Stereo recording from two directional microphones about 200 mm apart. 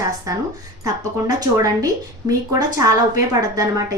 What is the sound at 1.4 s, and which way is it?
A woman's voice, 20° right (ahead or behind).